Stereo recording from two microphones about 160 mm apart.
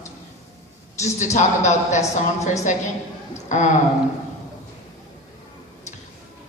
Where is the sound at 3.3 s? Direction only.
50° left (ahead or behind).